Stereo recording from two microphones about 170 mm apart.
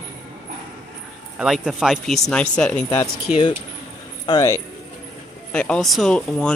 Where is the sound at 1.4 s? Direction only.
Centre (ahead or behind).